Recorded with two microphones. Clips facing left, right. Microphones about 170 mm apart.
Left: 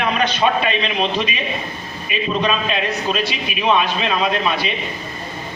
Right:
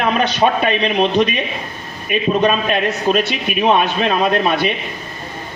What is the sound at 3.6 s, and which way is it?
Speech, 45° right (ahead or behind).